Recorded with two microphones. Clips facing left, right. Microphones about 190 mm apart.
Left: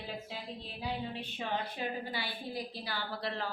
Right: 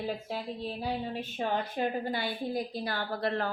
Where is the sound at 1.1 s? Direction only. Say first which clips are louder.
Right 5 dB; 45° right (ahead or behind).